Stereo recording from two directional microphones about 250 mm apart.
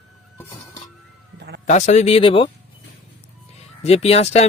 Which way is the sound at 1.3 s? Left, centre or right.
Right.